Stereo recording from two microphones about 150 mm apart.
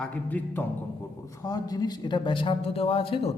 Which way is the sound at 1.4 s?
25° left (ahead or behind).